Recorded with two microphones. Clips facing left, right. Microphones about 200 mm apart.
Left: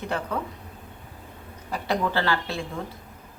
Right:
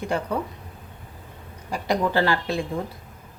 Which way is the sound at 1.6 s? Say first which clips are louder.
Right 2 dB; 15° right (ahead or behind).